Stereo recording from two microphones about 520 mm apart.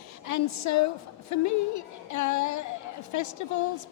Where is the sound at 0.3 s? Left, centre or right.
Left.